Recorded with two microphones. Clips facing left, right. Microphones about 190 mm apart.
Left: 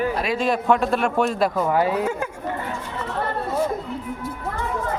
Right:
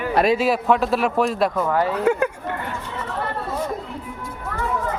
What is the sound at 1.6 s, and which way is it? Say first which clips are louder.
Speech: left 1 dB; 10° left (ahead or behind).